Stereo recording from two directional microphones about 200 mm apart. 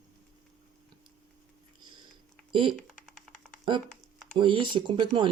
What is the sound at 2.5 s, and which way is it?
Speech, 25° right (ahead or behind).